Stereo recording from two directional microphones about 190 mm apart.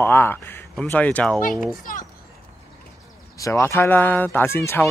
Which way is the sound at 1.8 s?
45° left (ahead or behind).